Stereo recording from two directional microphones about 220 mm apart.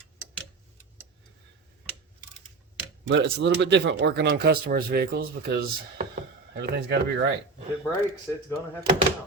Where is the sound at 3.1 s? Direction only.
55° right (ahead or behind).